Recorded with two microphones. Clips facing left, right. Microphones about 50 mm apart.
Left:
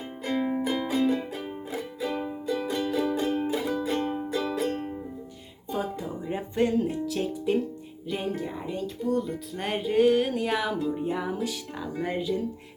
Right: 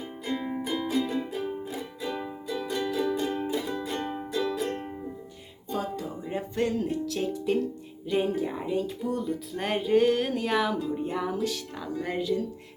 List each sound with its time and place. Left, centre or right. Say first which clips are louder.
0.3 s music: left 5 dB; centre
5.7 s music: left 1 dB; centre
12.0 s speech: even; centre